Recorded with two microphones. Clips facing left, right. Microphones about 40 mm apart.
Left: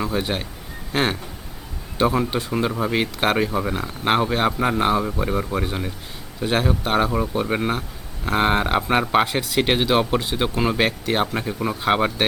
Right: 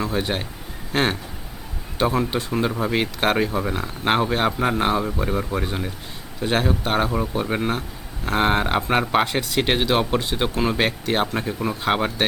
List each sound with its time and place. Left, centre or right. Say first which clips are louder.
0.0 s speech: even; centre